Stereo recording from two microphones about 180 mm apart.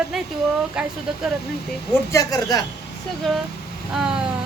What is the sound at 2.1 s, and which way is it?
Speech, 20° left (ahead or behind).